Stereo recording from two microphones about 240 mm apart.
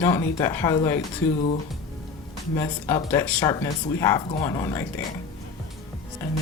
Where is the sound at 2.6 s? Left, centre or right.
Centre.